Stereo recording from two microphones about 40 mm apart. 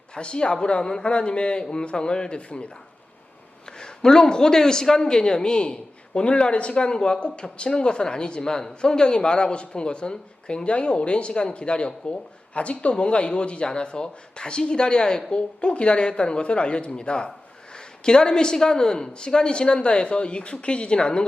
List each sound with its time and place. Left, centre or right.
0.1 s a man's voice: left